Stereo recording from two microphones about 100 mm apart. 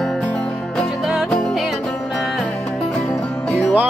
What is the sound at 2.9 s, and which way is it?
Music, 10° left (ahead or behind).